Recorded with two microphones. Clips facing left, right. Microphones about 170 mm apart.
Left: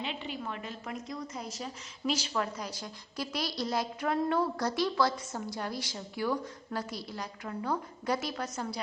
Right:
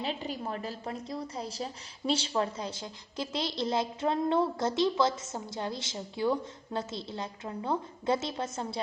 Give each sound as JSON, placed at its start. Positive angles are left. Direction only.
{"t": 0.0, "sound": "a woman's voice", "side_deg": -40}